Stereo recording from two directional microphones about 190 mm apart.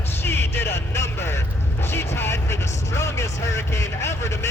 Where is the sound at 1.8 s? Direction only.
10° left (ahead or behind).